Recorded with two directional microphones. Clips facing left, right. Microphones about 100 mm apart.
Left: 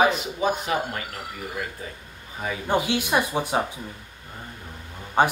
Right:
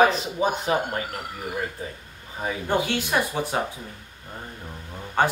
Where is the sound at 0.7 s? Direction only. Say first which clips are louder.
Right 2 dB; 35° right (ahead or behind).